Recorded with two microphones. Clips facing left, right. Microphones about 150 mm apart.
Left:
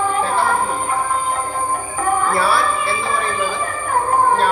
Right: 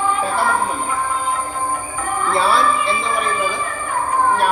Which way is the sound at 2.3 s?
20° right (ahead or behind).